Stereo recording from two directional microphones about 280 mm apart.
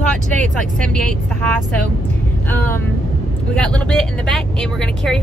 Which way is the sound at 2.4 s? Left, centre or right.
Centre.